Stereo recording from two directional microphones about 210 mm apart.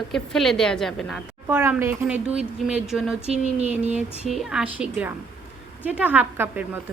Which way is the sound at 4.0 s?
Centre (ahead or behind).